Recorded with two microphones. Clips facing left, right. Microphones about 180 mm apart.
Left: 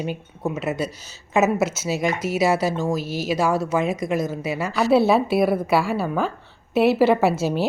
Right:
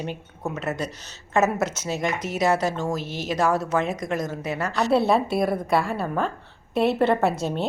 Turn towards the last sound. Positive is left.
turn(degrees=5)  # may be behind; listen again after turning